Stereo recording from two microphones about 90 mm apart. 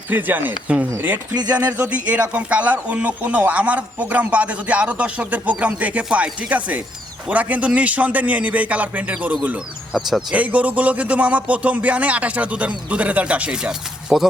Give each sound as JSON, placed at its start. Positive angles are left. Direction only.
{"t": 0.1, "sound": "speech", "side_deg": -20}